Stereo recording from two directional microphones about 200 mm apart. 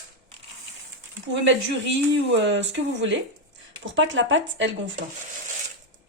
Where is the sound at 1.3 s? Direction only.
65° right (ahead or behind).